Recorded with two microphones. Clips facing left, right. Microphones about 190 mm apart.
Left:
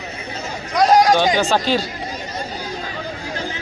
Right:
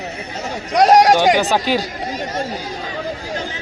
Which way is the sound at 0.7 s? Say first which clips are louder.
Right 2 dB; 70° right (ahead or behind).